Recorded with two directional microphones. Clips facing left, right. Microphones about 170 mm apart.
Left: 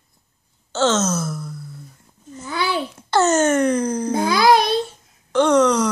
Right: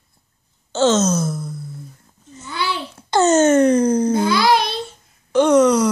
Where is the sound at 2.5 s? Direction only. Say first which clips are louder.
Left 2 dB; 50° left (ahead or behind).